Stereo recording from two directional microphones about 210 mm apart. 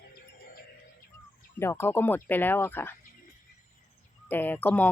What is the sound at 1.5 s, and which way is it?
A woman's voice, 10° left (ahead or behind).